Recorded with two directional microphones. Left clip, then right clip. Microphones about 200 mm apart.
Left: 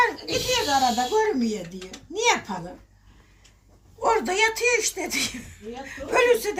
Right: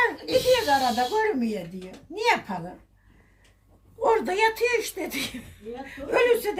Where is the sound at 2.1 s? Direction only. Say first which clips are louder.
Left 1 dB; 50° right (ahead or behind).